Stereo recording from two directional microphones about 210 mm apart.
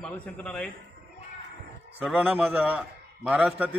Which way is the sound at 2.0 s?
5° right (ahead or behind).